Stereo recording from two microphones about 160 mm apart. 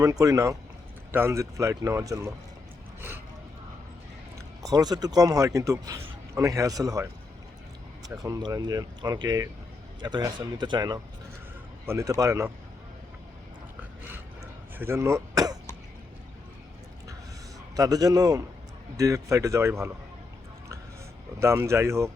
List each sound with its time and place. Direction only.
0.0 s a man's voice: 20° right (ahead or behind)
4.6 s a man's voice: 25° right (ahead or behind)
14.8 s speech: 15° right (ahead or behind)
17.7 s a man's voice: 25° right (ahead or behind)
21.3 s speech: 15° right (ahead or behind)